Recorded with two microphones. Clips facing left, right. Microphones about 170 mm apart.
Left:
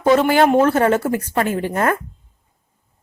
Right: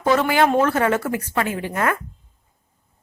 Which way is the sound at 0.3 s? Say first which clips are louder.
Left 4 dB; 30° left (ahead or behind).